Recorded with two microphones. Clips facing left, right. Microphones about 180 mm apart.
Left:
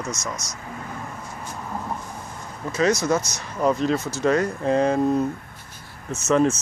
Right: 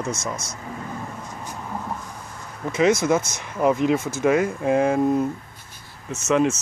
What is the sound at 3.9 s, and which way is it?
Speech, 50° right (ahead or behind).